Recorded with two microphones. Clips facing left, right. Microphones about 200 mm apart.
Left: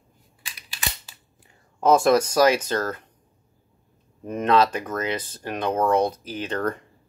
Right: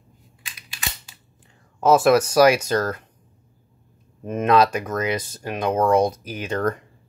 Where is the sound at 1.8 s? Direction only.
5° right (ahead or behind).